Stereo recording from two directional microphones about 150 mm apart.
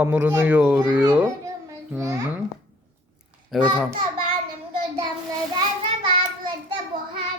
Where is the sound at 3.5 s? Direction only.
5° right (ahead or behind).